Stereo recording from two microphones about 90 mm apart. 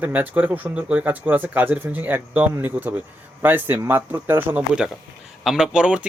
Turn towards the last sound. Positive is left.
turn(degrees=-10)  # may be behind; listen again after turning